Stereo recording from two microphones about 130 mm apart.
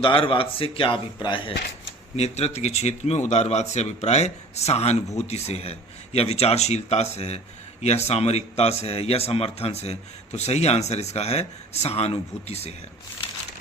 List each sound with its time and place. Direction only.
0.0 s speech: 40° left (ahead or behind)
2.1 s a man's voice: 55° left (ahead or behind)